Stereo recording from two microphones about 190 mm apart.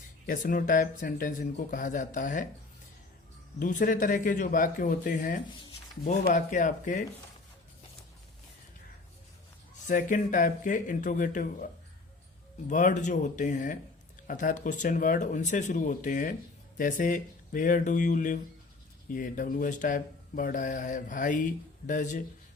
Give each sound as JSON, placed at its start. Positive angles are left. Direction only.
{"t": 0.3, "sound": "speech", "side_deg": 45}
{"t": 3.6, "sound": "speech", "side_deg": 45}
{"t": 9.8, "sound": "speech", "side_deg": 40}